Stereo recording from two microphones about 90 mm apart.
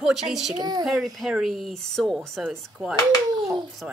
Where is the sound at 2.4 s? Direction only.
10° right (ahead or behind).